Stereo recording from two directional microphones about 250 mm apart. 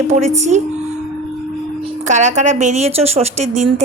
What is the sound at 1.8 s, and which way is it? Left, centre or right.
A woman's voice, right.